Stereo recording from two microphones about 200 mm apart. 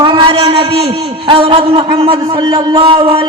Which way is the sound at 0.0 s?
25° right (ahead or behind).